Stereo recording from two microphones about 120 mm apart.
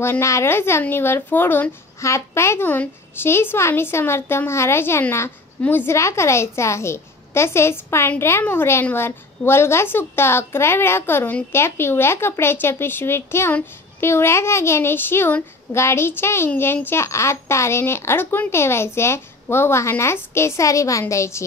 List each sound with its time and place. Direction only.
0.0 s a woman's voice: 20° left (ahead or behind)